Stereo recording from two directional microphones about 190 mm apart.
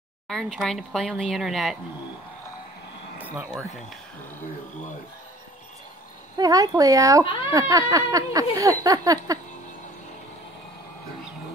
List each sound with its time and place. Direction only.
0.3 s speech: centre (ahead or behind)
6.3 s speech: 20° right (ahead or behind)
7.5 s a sound: 20° right (ahead or behind)